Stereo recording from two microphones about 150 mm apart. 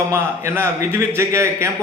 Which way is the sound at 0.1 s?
15° right (ahead or behind).